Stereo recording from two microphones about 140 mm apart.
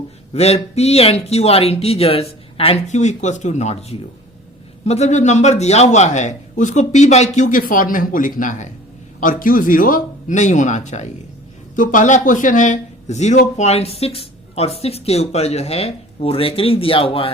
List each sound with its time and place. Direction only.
0.3 s a man's voice: 50° left (ahead or behind)
9.2 s a man's voice: 75° left (ahead or behind); by 11.1 s 55° left (ahead or behind)
11.8 s a man's voice: 70° left (ahead or behind); by 17.3 s 40° left (ahead or behind)